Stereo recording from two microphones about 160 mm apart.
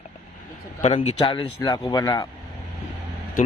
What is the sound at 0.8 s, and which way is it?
A man's voice, 40° left (ahead or behind).